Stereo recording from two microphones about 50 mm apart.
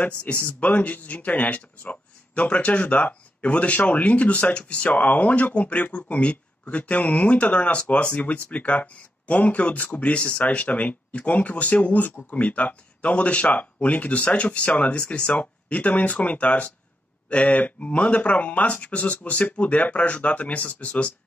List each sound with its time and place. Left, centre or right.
0.0 s speech: left
4.8 s speech: left